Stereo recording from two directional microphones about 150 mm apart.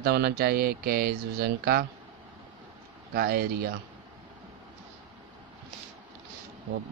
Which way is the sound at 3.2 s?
90° right.